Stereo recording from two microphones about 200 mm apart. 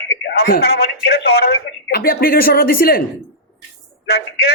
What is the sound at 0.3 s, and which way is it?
A man's voice, 50° left (ahead or behind).